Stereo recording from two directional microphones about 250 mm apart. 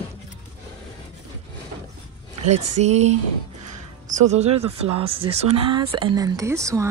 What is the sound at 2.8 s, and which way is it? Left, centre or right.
Speech, right.